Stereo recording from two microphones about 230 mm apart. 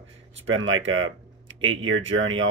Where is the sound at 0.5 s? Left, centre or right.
Right.